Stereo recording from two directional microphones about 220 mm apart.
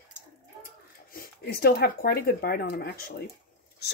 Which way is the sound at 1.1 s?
45° left (ahead or behind).